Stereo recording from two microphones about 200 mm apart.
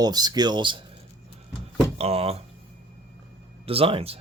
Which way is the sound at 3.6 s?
30° right (ahead or behind).